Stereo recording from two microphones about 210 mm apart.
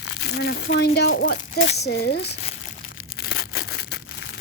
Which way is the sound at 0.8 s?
50° left (ahead or behind).